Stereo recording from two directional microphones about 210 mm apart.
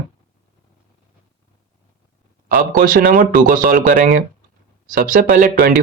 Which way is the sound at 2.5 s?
40° right (ahead or behind).